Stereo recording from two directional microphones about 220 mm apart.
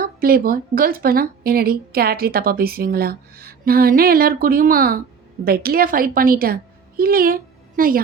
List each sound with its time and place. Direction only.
0.0 s a woman's voice: 40° right (ahead or behind)